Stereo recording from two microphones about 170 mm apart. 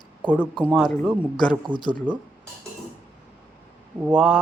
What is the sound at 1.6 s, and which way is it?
Speech, 25° right (ahead or behind).